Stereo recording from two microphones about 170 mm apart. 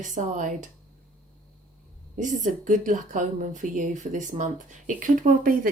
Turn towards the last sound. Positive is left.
turn(degrees=-55)  # may be behind; listen again after turning